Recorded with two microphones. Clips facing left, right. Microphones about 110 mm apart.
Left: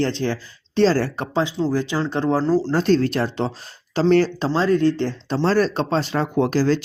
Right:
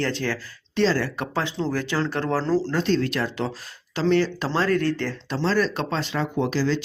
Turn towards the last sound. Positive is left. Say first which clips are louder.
# left 5 dB
turn(degrees=45)  # may be behind; listen again after turning